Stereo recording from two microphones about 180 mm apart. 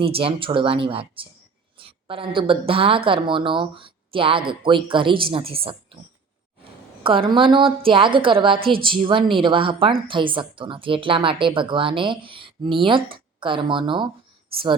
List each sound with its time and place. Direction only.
0.0 s a woman's voice: 30° right (ahead or behind)
7.0 s a woman's voice: 30° right (ahead or behind)